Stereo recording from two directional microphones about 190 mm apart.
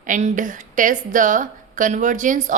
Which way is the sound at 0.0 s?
40° right (ahead or behind).